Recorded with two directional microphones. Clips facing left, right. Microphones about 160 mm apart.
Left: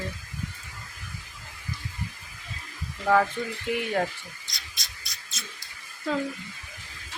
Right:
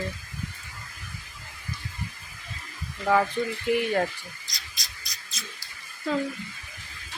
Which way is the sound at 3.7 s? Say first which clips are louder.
Right 2 dB; centre (ahead or behind).